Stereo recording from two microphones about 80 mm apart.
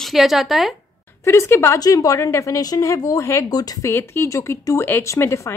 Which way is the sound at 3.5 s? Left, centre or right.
Left.